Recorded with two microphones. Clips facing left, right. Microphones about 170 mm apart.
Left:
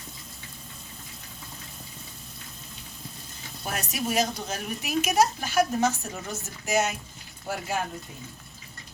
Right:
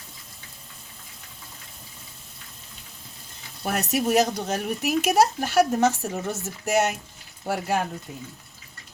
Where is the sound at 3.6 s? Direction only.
65° right (ahead or behind).